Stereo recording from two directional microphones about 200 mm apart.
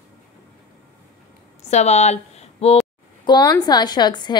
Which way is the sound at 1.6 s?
35° left (ahead or behind).